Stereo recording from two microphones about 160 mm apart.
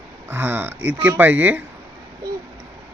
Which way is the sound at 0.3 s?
10° right (ahead or behind).